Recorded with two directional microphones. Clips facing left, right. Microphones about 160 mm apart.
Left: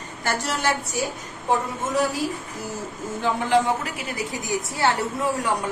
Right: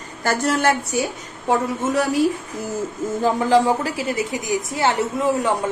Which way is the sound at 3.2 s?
35° right (ahead or behind).